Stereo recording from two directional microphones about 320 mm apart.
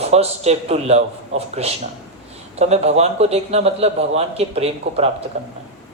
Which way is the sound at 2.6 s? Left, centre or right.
Centre.